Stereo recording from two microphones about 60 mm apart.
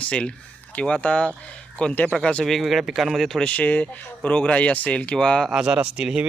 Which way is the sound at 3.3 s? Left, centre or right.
Left.